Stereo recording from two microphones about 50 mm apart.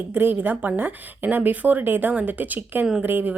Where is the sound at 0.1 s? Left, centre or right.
Right.